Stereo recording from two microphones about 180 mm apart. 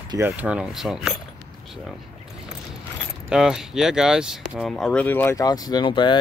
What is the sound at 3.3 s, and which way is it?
Speech, 5° right (ahead or behind).